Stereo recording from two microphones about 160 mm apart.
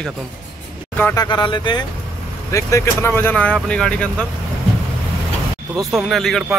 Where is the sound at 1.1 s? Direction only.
25° left (ahead or behind).